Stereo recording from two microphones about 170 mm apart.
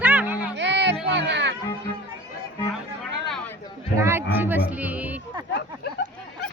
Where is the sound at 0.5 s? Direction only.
90° right.